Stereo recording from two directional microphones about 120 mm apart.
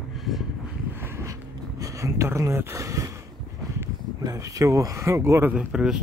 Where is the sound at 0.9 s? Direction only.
20° right (ahead or behind).